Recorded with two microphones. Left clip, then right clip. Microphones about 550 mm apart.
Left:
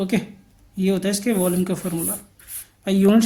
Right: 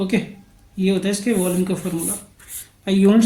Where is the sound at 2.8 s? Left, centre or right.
Left.